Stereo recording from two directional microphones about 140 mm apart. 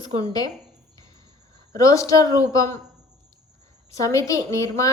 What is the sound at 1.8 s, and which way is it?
Speech, 25° left (ahead or behind).